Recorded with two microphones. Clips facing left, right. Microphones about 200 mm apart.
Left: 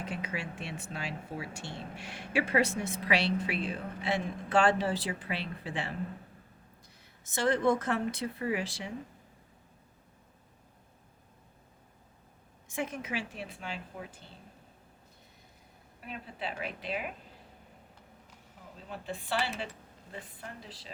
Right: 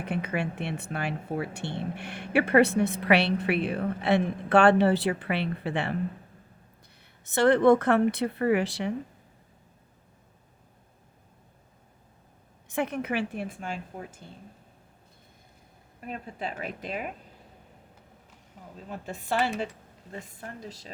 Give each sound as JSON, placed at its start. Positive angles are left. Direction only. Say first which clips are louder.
{"t": 0.0, "sound": "speech", "louder": "right 7 dB", "side_deg": -60}
{"t": 7.0, "sound": "speech", "louder": "right 8 dB", "side_deg": -65}
{"t": 12.6, "sound": "a woman's voice", "louder": "right 7 dB", "side_deg": -65}
{"t": 16.0, "sound": "a woman's voice", "louder": "right 5 dB", "side_deg": -45}
{"t": 18.9, "sound": "a woman's voice", "louder": "right 4 dB", "side_deg": -45}